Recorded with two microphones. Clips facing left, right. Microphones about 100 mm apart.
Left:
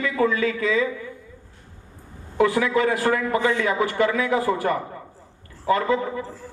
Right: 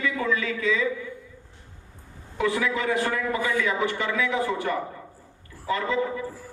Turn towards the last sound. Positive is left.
turn(degrees=45)  # may be behind; listen again after turning